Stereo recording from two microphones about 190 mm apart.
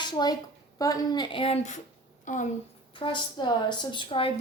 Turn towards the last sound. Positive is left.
turn(degrees=30)  # may be behind; listen again after turning